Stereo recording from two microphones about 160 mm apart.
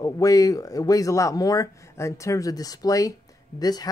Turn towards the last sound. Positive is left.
turn(degrees=25)  # may be behind; listen again after turning